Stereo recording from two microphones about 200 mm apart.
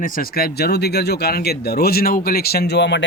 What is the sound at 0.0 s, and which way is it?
Speech, 45° left (ahead or behind).